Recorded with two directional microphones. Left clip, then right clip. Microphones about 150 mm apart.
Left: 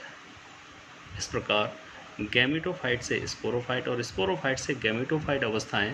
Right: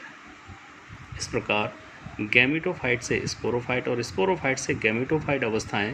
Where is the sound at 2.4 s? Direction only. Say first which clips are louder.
Right 4 dB; 20° right (ahead or behind).